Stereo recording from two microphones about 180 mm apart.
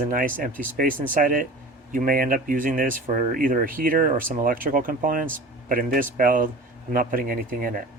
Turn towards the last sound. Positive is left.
turn(degrees=-50)  # may be behind; listen again after turning